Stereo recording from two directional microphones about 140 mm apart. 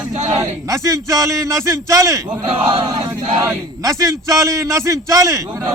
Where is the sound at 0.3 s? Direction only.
25° right (ahead or behind).